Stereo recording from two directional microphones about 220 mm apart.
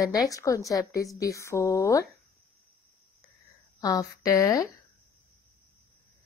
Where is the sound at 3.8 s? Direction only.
15° left (ahead or behind).